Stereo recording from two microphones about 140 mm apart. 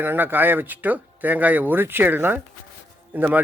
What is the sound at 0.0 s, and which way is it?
Speech, 15° right (ahead or behind).